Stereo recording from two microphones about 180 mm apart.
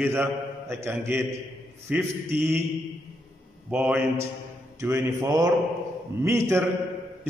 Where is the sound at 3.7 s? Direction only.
10° right (ahead or behind).